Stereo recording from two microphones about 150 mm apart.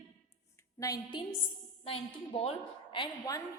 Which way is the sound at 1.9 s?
40° left (ahead or behind).